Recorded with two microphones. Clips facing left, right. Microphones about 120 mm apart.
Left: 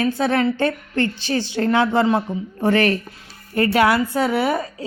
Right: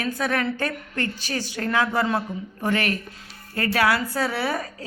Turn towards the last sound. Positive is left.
turn(degrees=20)  # may be behind; listen again after turning